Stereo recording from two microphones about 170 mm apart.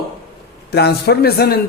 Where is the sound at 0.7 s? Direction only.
70° left (ahead or behind).